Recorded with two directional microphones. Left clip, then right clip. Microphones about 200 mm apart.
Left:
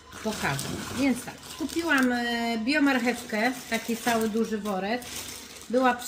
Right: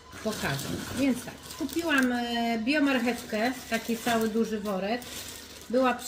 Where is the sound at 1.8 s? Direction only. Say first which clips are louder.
Left 2 dB; centre (ahead or behind).